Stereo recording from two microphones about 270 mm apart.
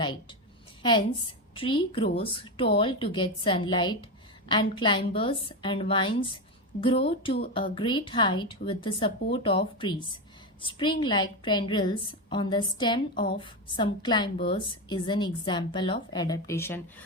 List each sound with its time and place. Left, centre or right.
0.0 s a woman's voice: centre